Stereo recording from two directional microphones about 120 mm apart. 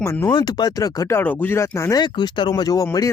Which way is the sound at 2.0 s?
40° left (ahead or behind).